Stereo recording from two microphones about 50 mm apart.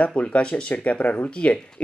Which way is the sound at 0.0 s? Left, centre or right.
Left.